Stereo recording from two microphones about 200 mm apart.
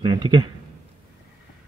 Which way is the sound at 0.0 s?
25° right (ahead or behind).